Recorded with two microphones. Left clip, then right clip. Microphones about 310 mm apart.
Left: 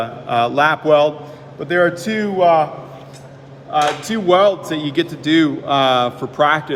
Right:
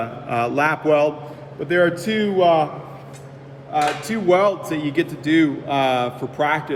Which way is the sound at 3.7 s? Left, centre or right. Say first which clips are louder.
Left 4 dB; centre.